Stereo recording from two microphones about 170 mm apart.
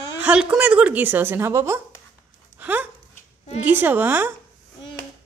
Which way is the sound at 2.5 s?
10° right (ahead or behind).